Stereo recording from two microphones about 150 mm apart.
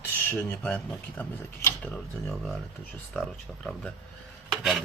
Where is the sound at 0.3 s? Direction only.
10° left (ahead or behind).